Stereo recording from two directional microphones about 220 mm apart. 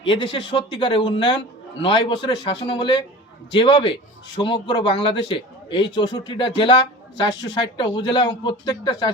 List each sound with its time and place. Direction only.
0.1 s speech: 25° left (ahead or behind)